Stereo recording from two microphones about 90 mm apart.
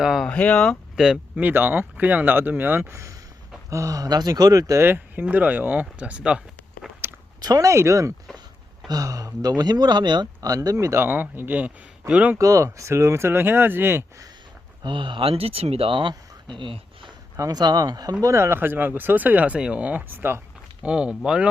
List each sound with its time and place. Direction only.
0.0 s speech: 5° right (ahead or behind)
0.3 s speech: 10° left (ahead or behind)
1.4 s speech: 20° right (ahead or behind); by 4.8 s 40° right (ahead or behind)
4.8 s speech: 25° right (ahead or behind)
7.0 s biting: 25° right (ahead or behind)
7.4 s speech: 40° right (ahead or behind); by 12.4 s 15° right (ahead or behind)
12.4 s speech: 35° right (ahead or behind)
14.8 s speech: 65° right (ahead or behind)
17.3 s speech: 35° right (ahead or behind)
17.6 s speech: 50° right (ahead or behind)
18.2 s speech: 35° right (ahead or behind)
20.8 s speech: 10° right (ahead or behind)